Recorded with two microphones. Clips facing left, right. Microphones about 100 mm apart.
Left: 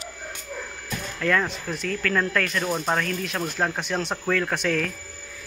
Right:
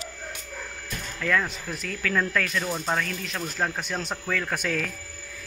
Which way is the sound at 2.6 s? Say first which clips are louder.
Left 3 dB; 15° left (ahead or behind).